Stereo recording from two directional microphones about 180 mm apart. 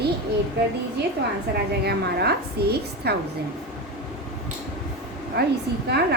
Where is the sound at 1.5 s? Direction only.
65° right (ahead or behind).